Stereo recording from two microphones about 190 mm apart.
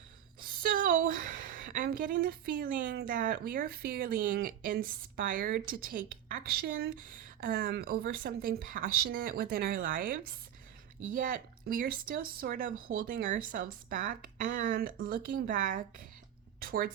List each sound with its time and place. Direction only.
0.4 s a sound: 50° right (ahead or behind)
2.8 s speech: 70° right (ahead or behind)
3.1 s a woman's voice: 45° right (ahead or behind)